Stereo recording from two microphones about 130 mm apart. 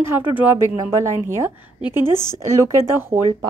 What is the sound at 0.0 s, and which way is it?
A woman's voice, 15° right (ahead or behind).